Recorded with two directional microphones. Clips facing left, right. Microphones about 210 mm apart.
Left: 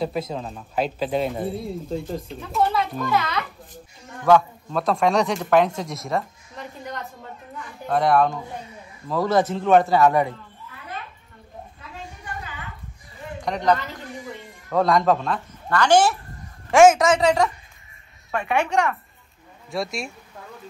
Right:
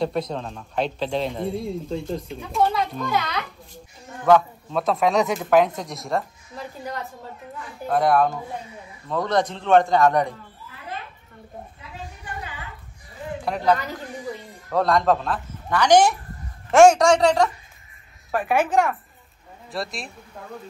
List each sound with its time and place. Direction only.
0.0 s a man's voice: 5° left (ahead or behind)
7.9 s a man's voice: centre (ahead or behind)
13.5 s a man's voice: 5° right (ahead or behind)
15.8 s speech: 15° right (ahead or behind)
16.7 s a man's voice: centre (ahead or behind)